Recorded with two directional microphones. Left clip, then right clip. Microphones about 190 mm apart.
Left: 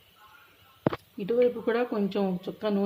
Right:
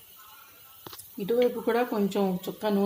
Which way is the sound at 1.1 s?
10° right (ahead or behind).